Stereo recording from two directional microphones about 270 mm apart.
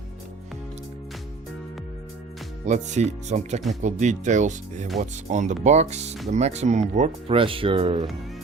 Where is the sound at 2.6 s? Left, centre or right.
Right.